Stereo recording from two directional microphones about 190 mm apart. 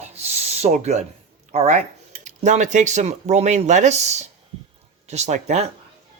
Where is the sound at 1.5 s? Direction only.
35° right (ahead or behind).